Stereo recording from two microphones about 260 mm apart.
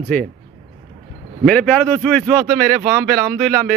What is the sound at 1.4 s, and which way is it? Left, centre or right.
Speech, centre.